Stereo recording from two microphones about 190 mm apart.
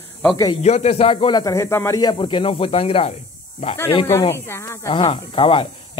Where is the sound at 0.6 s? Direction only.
35° left (ahead or behind).